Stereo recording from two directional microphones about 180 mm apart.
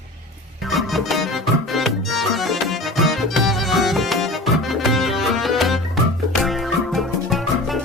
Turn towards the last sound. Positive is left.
turn(degrees=0)  # may be behind; listen again after turning